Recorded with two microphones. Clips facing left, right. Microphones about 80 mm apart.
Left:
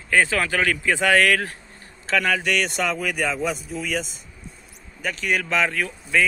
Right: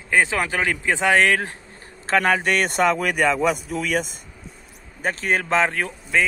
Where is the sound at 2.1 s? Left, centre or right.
Right.